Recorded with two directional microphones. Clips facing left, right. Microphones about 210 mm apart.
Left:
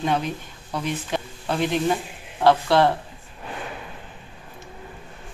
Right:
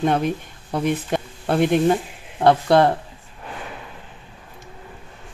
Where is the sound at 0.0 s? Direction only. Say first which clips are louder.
Right 4 dB; 50° right (ahead or behind).